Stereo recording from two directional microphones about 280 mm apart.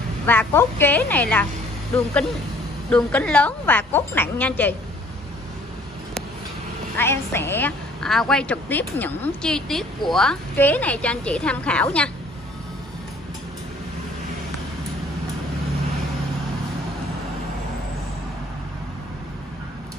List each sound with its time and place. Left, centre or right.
0.3 s a woman's voice: centre
2.9 s a woman's voice: centre
7.0 s a woman's voice: centre